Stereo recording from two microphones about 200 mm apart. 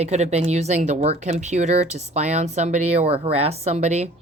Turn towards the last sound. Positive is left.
turn(degrees=-35)  # may be behind; listen again after turning